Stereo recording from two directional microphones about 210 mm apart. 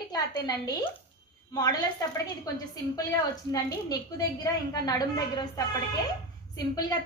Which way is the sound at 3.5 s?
15° left (ahead or behind).